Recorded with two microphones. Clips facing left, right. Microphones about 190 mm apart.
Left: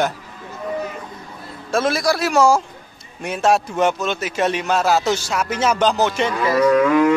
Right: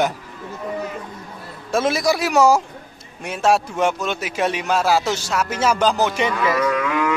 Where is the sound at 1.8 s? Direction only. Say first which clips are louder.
Even; 20° right (ahead or behind).